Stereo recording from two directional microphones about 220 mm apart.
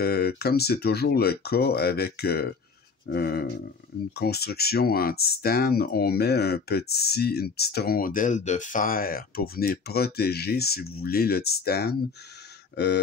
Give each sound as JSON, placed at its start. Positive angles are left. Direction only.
{"t": 0.0, "sound": "speech", "side_deg": 45}